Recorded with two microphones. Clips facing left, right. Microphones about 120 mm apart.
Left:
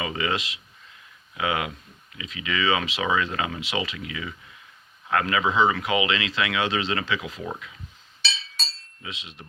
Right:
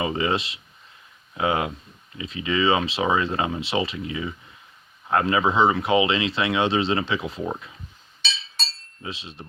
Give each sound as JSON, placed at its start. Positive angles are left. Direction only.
{"t": 0.0, "sound": "speech", "side_deg": -30}
{"t": 9.0, "sound": "speech", "side_deg": -35}